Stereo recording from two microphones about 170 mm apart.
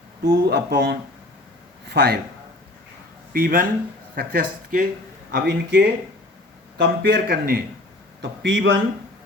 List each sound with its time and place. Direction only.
0.3 s speech: 65° right (ahead or behind)
3.3 s speech: 55° right (ahead or behind)
5.3 s speech: 70° right (ahead or behind)
8.2 s a man's voice: 90° right